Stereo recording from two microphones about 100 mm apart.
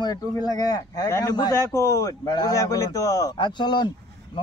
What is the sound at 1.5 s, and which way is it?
A man's voice, 30° left (ahead or behind).